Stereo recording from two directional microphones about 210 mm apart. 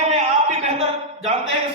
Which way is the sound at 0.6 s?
30° right (ahead or behind).